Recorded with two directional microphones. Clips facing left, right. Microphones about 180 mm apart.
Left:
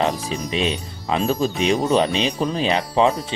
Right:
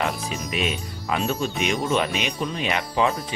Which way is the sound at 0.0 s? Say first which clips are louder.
Left 5 dB; 30° left (ahead or behind).